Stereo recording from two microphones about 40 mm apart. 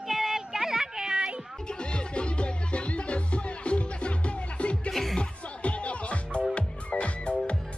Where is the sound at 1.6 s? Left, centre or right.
Left.